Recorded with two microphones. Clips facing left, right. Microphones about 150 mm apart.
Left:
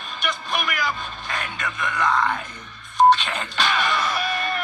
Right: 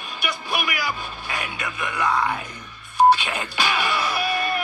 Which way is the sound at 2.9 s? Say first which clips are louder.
Even; 10° right (ahead or behind).